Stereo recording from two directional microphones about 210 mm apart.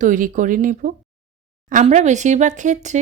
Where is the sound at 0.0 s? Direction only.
35° right (ahead or behind).